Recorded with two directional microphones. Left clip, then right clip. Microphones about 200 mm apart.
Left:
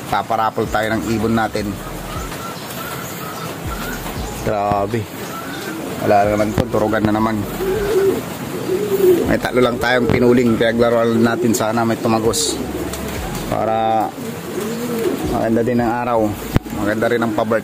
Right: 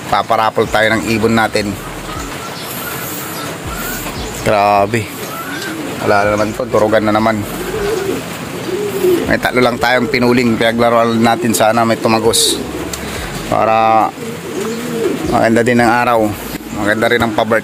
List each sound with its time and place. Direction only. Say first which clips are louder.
0.1 s a man's voice: right 5 dB; centre (ahead or behind)
4.5 s a man's voice: right 7 dB; 5° right (ahead or behind)
6.0 s a man's voice: right 2 dB; 5° left (ahead or behind)
9.3 s a man's voice: right 3 dB; centre (ahead or behind)
13.6 s a man's voice: right 7 dB; 5° left (ahead or behind)
15.4 s a man's voice: right 7 dB; 5° right (ahead or behind)